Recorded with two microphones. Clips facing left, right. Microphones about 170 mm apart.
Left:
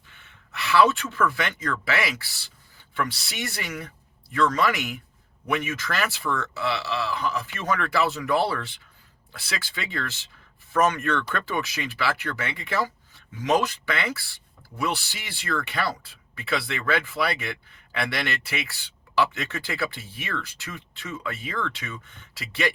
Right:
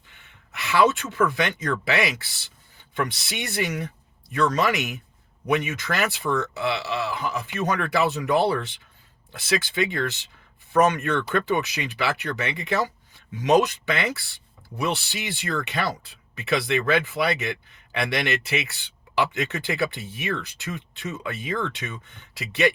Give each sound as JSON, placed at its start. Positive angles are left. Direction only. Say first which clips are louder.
{"t": 0.1, "sound": "speech", "louder": "left 2 dB", "side_deg": -15}